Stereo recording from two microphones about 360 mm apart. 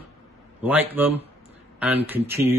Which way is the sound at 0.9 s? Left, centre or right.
Centre.